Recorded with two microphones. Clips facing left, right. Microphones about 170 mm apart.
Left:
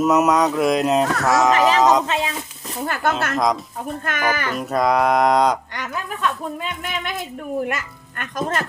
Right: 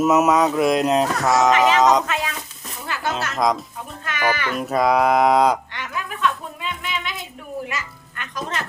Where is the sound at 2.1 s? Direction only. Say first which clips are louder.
Left 2 dB; 25° left (ahead or behind).